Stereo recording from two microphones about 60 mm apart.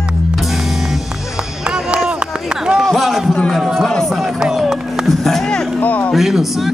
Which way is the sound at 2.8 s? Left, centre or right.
Centre.